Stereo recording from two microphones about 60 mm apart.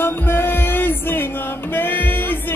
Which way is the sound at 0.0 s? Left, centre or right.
Left.